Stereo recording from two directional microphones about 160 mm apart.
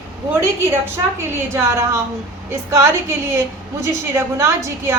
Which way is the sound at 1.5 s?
15° right (ahead or behind).